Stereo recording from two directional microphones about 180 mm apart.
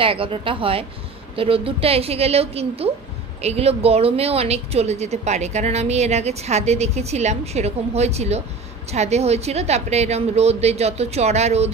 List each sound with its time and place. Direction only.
0.0 s a woman's voice: 30° right (ahead or behind)